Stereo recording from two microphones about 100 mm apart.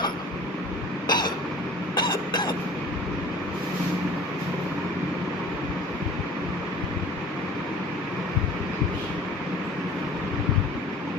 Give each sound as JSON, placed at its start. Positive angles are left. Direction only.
{"t": 1.0, "sound": "cough", "side_deg": 45}